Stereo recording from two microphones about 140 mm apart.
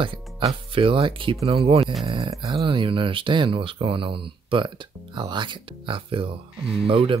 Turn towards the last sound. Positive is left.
turn(degrees=-40)  # may be behind; listen again after turning